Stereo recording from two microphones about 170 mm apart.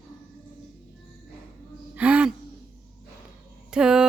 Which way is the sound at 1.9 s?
10° right (ahead or behind).